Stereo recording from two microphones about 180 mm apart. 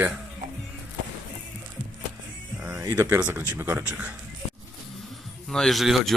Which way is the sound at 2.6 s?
5° right (ahead or behind).